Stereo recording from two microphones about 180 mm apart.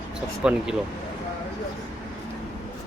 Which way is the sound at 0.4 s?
5° right (ahead or behind).